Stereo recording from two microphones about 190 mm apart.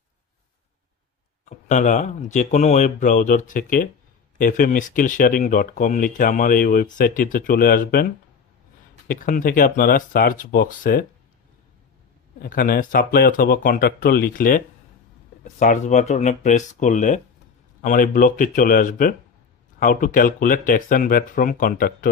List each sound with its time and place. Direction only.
1.7 s speech: 40° left (ahead or behind)
12.4 s speech: 50° left (ahead or behind)